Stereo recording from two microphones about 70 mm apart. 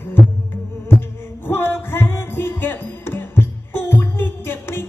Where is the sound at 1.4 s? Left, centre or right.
Left.